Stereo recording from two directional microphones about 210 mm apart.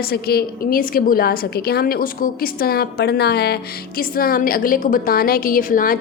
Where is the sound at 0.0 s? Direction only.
50° left (ahead or behind).